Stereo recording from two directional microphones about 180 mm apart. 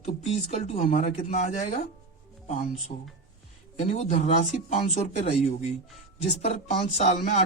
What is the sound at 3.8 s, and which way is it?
Speech, 40° left (ahead or behind).